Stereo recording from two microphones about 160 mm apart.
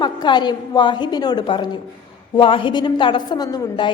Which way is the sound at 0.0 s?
30° left (ahead or behind).